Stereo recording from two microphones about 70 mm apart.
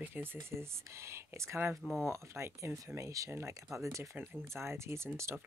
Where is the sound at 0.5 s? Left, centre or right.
Right.